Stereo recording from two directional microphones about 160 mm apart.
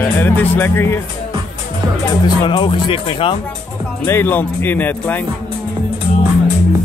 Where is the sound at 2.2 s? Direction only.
30° left (ahead or behind).